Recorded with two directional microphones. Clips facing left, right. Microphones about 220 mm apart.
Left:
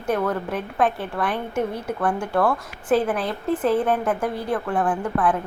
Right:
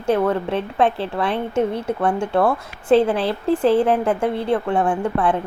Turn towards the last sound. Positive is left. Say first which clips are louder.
# right 2 dB
turn(degrees=-25)  # may be behind; listen again after turning